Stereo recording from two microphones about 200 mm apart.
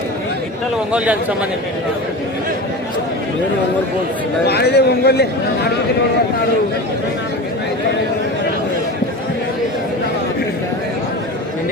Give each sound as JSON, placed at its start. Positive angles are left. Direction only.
{"t": 0.9, "sound": "a man's voice", "side_deg": -5}
{"t": 4.4, "sound": "a man's voice", "side_deg": 55}